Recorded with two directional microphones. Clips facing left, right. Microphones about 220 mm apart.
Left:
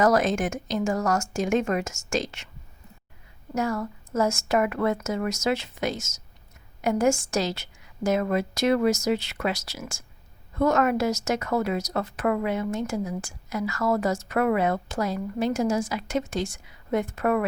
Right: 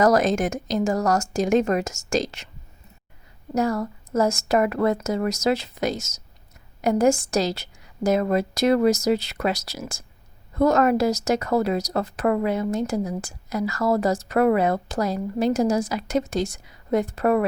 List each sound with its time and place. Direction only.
0.0 s a woman's voice: 40° right (ahead or behind)
3.5 s a woman's voice: 35° right (ahead or behind)